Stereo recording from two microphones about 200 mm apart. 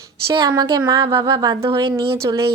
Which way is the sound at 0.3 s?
20° right (ahead or behind).